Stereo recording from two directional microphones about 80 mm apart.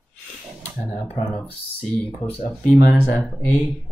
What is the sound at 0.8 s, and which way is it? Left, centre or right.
Speech, centre.